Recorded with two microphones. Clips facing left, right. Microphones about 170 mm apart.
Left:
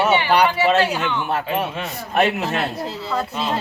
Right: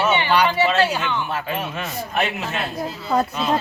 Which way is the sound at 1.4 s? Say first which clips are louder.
Left 3 dB; 30° left (ahead or behind).